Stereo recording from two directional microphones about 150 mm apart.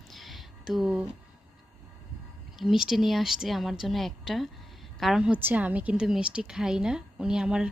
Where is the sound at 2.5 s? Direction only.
5° right (ahead or behind).